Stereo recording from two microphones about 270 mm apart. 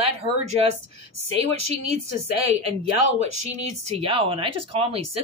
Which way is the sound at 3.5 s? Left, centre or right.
Right.